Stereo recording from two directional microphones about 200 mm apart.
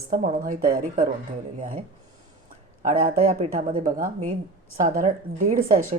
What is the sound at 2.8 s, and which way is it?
Speech, 40° right (ahead or behind).